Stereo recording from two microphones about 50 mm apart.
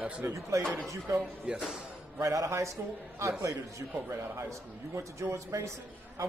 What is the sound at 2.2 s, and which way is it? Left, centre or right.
Speech, right.